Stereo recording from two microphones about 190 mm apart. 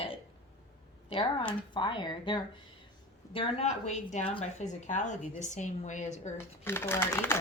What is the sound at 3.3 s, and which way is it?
A woman's voice, 35° left (ahead or behind).